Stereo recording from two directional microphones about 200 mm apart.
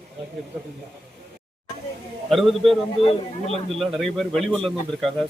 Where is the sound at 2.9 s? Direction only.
30° left (ahead or behind).